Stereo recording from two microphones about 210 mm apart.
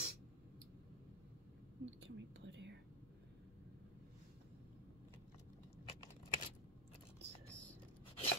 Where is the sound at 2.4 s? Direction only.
60° right (ahead or behind).